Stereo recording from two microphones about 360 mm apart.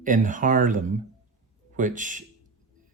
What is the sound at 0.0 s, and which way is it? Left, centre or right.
Speech, right.